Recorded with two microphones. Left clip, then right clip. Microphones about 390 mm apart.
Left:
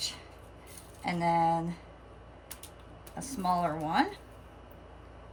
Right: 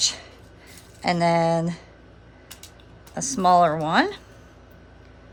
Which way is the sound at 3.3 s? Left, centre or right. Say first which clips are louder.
Right 13 dB; centre.